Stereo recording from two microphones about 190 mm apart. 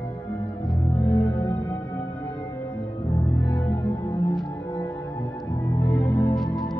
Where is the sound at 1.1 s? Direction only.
25° left (ahead or behind).